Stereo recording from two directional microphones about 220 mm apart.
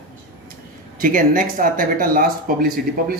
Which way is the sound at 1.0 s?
40° right (ahead or behind).